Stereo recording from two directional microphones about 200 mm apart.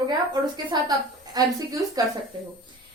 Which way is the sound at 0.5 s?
20° right (ahead or behind).